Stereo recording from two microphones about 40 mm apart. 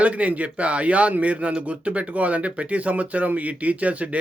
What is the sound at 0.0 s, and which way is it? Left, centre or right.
Speech, right.